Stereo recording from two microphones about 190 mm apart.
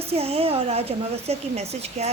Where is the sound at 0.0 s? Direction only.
30° right (ahead or behind).